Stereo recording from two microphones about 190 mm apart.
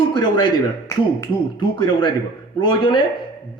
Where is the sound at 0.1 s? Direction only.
25° left (ahead or behind).